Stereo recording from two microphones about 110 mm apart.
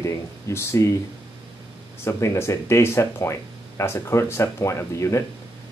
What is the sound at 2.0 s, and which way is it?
Speech, 25° left (ahead or behind).